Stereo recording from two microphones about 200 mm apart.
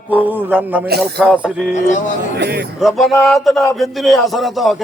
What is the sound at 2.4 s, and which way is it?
Speech, 55° right (ahead or behind).